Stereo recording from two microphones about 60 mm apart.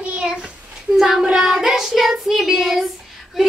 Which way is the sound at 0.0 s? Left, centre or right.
Right.